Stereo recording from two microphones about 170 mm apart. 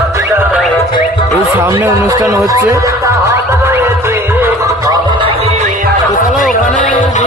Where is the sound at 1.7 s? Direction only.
20° right (ahead or behind).